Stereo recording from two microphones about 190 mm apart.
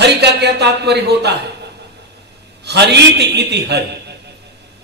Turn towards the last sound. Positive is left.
turn(degrees=-60)  # may be behind; listen again after turning